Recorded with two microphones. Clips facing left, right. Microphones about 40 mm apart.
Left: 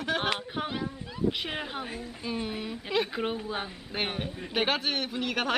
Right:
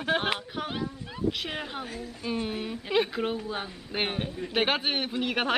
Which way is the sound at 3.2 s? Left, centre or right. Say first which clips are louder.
Right 1 dB; centre.